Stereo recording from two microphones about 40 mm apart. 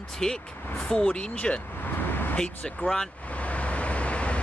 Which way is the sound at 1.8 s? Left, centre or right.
Left.